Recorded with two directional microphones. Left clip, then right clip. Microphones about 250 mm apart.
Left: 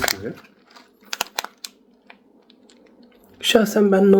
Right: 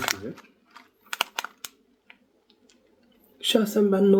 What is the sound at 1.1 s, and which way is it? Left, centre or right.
Crumpling, centre.